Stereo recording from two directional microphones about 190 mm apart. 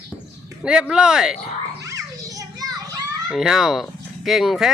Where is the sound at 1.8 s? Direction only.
15° right (ahead or behind).